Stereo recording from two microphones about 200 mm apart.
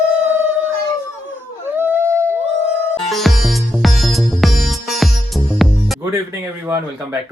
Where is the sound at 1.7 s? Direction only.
10° right (ahead or behind).